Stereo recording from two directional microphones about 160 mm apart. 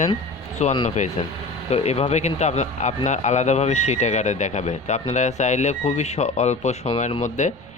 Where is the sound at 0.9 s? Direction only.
45° left (ahead or behind).